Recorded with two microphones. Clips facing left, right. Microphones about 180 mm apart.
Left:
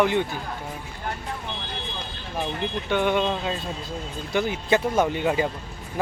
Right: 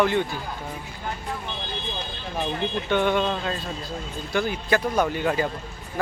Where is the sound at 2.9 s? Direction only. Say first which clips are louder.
Even; 10° left (ahead or behind).